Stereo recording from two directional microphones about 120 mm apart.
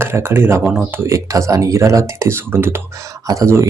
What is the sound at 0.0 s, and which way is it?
Speech, 20° right (ahead or behind).